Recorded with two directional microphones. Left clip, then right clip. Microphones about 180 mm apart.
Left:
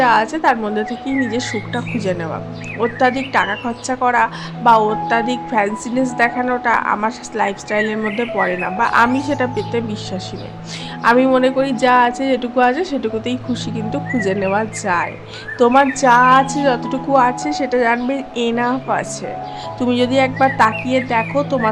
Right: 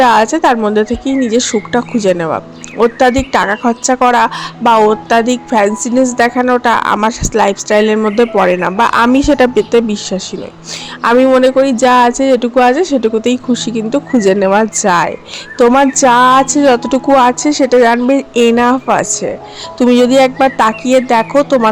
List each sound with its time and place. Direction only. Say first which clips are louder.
0.0 s a woman's voice: right 5 dB; 45° right (ahead or behind)